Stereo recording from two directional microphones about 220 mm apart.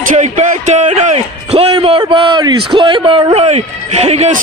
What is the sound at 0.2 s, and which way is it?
A man's voice, 35° right (ahead or behind).